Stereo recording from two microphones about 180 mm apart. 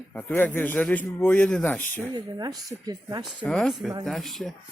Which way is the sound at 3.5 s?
Centre (ahead or behind).